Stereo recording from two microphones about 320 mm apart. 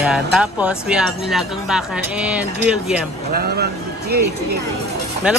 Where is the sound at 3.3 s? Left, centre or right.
Right.